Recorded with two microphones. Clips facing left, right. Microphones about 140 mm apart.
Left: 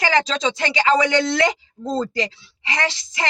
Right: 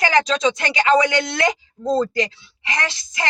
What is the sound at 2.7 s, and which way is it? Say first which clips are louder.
Speech: left 2 dB; 30° left (ahead or behind).